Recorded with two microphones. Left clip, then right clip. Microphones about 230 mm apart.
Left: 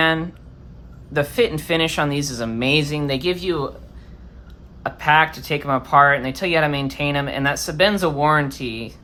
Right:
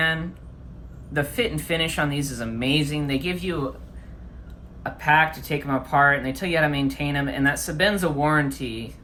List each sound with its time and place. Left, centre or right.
0.0 s speech: left
4.8 s speech: left